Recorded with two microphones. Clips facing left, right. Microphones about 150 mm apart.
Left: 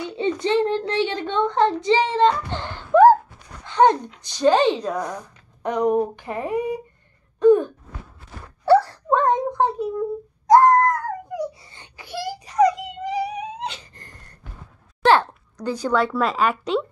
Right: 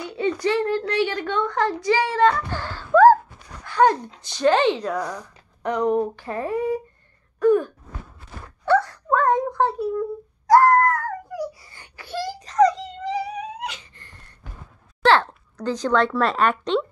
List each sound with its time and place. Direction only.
0.0 s a child's voice: 25° left (ahead or behind)
3.6 s dog: 20° left (ahead or behind)
4.2 s speech: 15° left (ahead or behind)
7.3 s gasp: 20° left (ahead or behind)
8.6 s wail: 30° left (ahead or behind)
15.0 s speech: 15° left (ahead or behind)